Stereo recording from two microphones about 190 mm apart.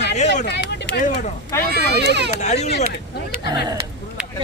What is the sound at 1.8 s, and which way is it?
Speech, 60° right (ahead or behind).